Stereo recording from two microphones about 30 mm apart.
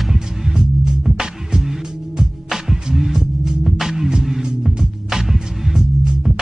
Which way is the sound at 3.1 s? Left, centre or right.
Right.